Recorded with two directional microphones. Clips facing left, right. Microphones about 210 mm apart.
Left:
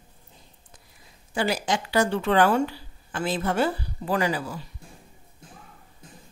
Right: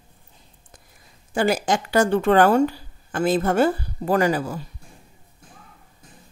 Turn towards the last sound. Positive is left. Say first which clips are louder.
# right 5 dB
turn(degrees=-45)  # may be behind; listen again after turning